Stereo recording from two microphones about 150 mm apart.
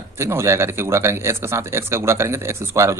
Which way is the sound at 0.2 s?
20° right (ahead or behind).